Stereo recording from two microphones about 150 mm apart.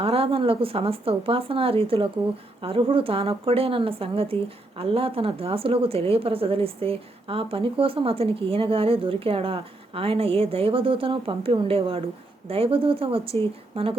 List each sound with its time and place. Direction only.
0.0 s a woman's voice: 40° right (ahead or behind)